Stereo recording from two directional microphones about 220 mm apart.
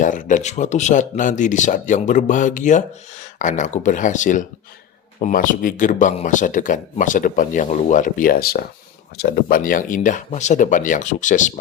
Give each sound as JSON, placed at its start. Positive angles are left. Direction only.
{"t": 0.0, "sound": "speech", "side_deg": 35}